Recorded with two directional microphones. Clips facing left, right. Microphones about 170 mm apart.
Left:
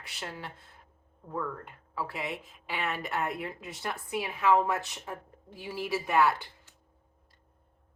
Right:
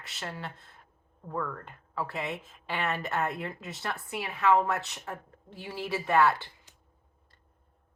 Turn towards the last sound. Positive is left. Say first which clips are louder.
# right 1 dB
turn(degrees=15)  # may be behind; listen again after turning